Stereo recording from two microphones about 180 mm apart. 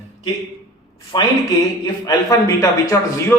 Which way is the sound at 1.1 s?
25° left (ahead or behind).